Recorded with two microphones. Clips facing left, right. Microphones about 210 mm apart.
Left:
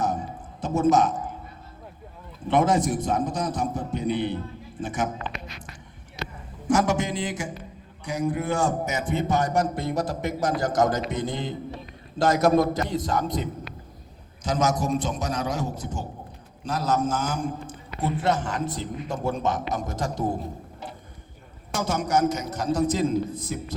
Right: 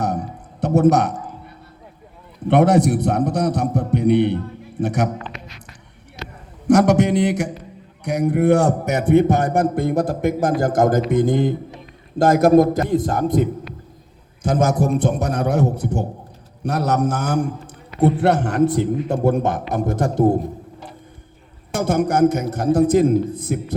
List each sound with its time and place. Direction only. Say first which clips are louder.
0.0 s a sound: right 4 dB; 65° right (ahead or behind)
2.5 s a man's voice: right 7 dB; 65° right (ahead or behind)
6.7 s a man's voice: right 9 dB; 65° right (ahead or behind)
21.7 s a man's voice: right 6 dB; 55° right (ahead or behind)